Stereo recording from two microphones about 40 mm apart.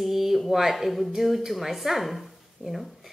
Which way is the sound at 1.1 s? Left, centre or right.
Centre.